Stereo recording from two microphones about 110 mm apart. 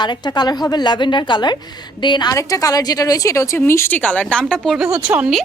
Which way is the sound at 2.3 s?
30° left (ahead or behind).